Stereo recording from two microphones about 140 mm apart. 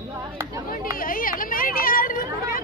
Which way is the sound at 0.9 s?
90° left.